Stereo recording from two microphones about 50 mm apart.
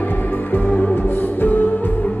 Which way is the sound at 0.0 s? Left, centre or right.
Left.